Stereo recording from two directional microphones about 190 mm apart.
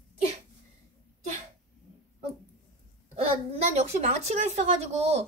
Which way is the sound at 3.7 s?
35° right (ahead or behind).